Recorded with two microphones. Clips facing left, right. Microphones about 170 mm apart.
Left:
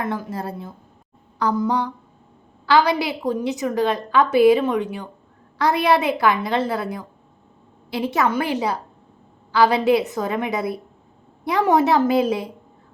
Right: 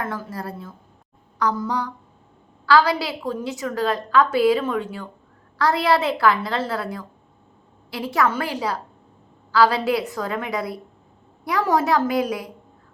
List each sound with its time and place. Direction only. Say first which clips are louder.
0.0 s a woman's voice: left 3 dB; 20° left (ahead or behind)